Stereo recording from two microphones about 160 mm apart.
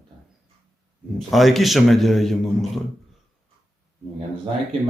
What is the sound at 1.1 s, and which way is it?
A man's voice, centre (ahead or behind).